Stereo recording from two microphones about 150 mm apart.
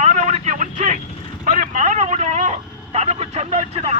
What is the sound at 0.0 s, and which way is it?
Vehicle, 50° right (ahead or behind).